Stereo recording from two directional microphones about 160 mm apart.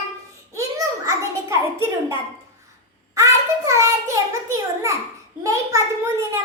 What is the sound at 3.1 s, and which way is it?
A child's voice, 20° right (ahead or behind).